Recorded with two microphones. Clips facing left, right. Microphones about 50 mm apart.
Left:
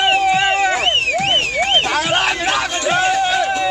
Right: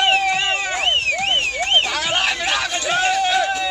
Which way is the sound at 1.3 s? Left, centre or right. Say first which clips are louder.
Left 3 dB; left.